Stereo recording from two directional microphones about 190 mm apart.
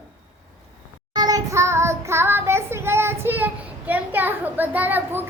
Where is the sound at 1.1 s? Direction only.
20° right (ahead or behind).